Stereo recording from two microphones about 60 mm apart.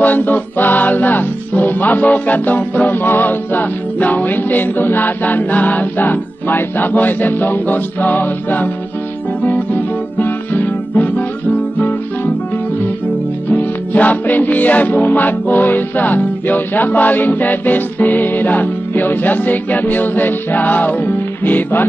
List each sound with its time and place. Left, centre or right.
0.0 s music: left
13.5 s music: left